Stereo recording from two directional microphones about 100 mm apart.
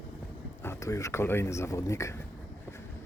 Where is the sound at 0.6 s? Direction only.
30° left (ahead or behind).